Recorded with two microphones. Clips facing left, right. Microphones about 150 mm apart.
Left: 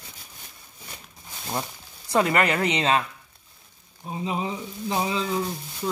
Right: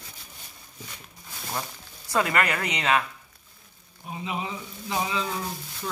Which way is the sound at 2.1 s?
25° left (ahead or behind).